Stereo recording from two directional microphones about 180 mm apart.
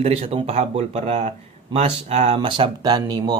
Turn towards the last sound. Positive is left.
turn(degrees=-25)  # may be behind; listen again after turning